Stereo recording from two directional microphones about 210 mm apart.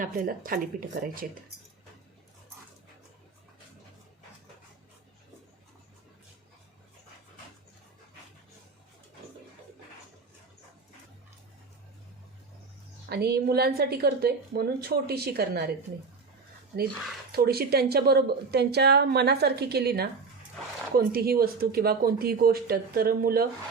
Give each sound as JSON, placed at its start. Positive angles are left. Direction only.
{"t": 0.0, "sound": "speech", "side_deg": -40}
{"t": 13.1, "sound": "a woman's voice", "side_deg": -50}
{"t": 17.3, "sound": "a woman's voice", "side_deg": -45}